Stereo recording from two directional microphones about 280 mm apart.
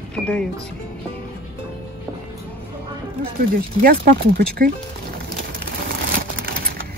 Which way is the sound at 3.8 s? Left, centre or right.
Right.